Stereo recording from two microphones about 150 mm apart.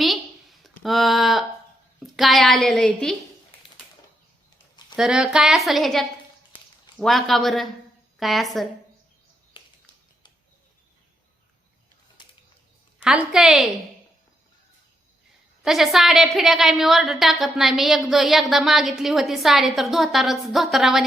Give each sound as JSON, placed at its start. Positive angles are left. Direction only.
{"t": 0.0, "sound": "a sound", "side_deg": 0}
{"t": 0.8, "sound": "a woman's voice", "side_deg": 0}
{"t": 4.9, "sound": "a woman's voice", "side_deg": -5}
{"t": 6.5, "sound": "a sound", "side_deg": 30}
{"t": 7.0, "sound": "a woman's voice", "side_deg": 0}
{"t": 13.0, "sound": "a woman's voice", "side_deg": -5}
{"t": 15.6, "sound": "a woman's voice", "side_deg": 0}